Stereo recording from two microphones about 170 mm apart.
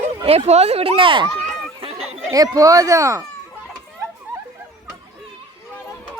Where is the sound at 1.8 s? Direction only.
35° right (ahead or behind).